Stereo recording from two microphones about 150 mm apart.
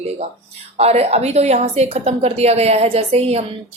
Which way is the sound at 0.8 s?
45° right (ahead or behind).